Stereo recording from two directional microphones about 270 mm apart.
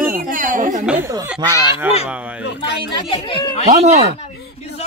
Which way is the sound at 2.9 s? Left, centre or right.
Centre.